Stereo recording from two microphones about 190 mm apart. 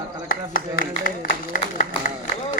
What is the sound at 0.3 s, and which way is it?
Speech, 45° left (ahead or behind).